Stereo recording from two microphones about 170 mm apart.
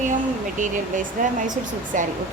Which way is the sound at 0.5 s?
50° right (ahead or behind).